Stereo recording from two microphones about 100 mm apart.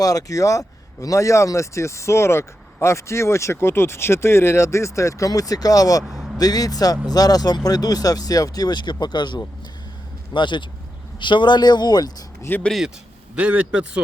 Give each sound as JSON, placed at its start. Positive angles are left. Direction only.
{"t": 0.0, "sound": "speech", "side_deg": 35}
{"t": 6.1, "sound": "vehicle", "side_deg": -5}
{"t": 6.4, "sound": "speech", "side_deg": 40}
{"t": 12.5, "sound": "speech", "side_deg": 20}
{"t": 13.3, "sound": "a man's voice", "side_deg": -15}